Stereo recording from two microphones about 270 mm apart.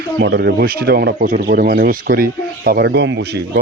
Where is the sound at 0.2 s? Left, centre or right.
Right.